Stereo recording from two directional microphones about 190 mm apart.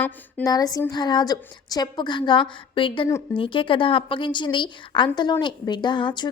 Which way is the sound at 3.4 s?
25° left (ahead or behind).